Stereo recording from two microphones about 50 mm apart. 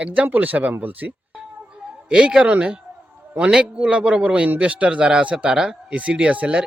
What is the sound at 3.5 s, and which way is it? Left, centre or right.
Speech, centre.